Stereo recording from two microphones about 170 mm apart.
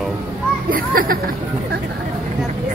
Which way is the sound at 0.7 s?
60° right (ahead or behind).